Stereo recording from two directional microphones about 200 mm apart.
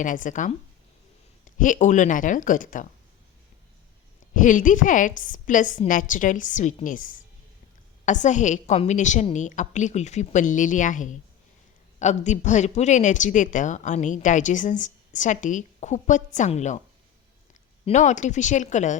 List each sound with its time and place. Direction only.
0.0 s speech: 40° left (ahead or behind)
4.4 s speech: 40° left (ahead or behind)
17.8 s speech: 35° left (ahead or behind)